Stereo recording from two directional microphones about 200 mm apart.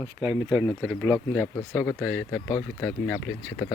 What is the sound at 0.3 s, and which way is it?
Speech, centre (ahead or behind).